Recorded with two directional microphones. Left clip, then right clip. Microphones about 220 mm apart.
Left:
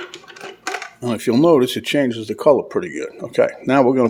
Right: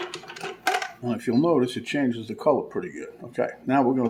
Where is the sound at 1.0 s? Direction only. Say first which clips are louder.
Left 10 dB; 50° left (ahead or behind).